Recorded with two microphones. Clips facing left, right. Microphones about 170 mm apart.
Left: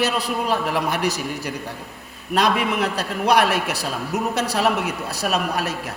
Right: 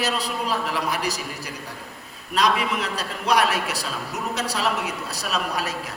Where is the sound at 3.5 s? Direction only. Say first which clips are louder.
Left 3 dB; 60° left (ahead or behind).